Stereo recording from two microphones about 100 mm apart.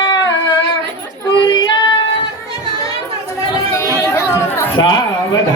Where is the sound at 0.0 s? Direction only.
45° left (ahead or behind).